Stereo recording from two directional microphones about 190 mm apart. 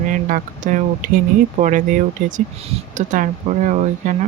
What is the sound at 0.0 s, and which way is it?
Speech, 45° right (ahead or behind).